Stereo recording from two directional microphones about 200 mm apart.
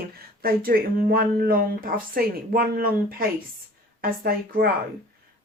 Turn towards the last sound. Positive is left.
turn(degrees=-50)  # may be behind; listen again after turning